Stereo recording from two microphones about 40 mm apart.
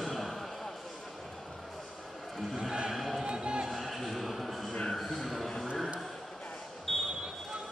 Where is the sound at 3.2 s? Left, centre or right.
Right.